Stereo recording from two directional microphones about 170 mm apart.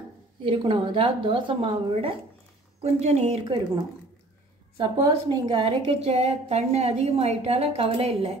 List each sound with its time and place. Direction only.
0.4 s a woman's voice: 30° right (ahead or behind)
4.7 s a woman's voice: 30° right (ahead or behind)